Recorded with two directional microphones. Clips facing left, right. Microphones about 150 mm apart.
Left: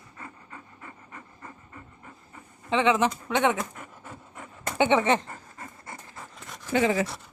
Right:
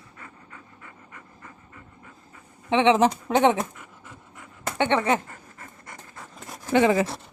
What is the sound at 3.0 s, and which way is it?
Speech, 35° right (ahead or behind).